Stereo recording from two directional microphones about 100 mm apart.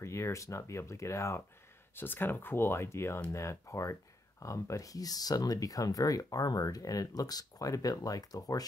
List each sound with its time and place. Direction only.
0.0 s speech: 30° left (ahead or behind)